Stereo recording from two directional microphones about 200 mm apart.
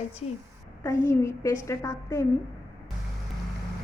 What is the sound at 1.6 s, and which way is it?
Speech, 15° left (ahead or behind).